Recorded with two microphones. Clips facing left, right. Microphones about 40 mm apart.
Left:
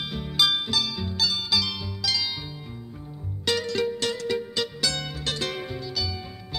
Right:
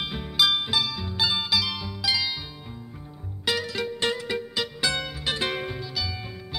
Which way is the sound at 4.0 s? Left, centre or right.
Right.